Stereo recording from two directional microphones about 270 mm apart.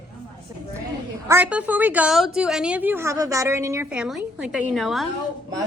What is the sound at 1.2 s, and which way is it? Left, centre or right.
A woman's voice, centre.